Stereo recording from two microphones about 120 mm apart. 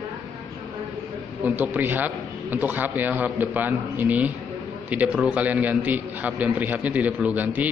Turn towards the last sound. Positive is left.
turn(degrees=-15)  # may be behind; listen again after turning